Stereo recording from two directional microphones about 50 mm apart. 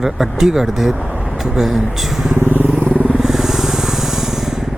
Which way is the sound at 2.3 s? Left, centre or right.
Right.